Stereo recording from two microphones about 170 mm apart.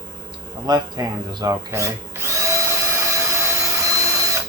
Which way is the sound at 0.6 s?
25° right (ahead or behind).